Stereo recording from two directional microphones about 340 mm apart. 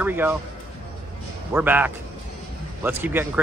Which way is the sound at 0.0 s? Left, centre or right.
Centre.